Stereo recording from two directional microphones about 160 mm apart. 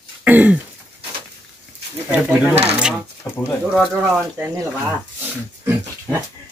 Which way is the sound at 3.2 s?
5° left (ahead or behind).